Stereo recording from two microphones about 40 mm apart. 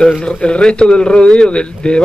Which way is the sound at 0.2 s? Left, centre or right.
Left.